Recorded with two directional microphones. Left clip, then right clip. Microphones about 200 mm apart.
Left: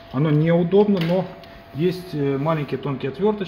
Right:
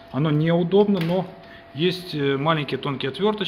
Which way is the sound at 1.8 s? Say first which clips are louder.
Even; centre (ahead or behind).